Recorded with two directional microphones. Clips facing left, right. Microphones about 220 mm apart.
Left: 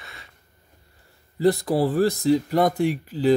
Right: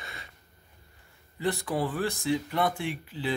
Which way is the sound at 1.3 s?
40° left (ahead or behind).